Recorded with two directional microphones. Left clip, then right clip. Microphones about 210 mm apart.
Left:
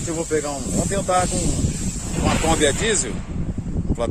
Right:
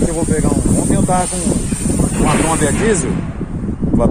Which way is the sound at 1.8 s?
55° right (ahead or behind).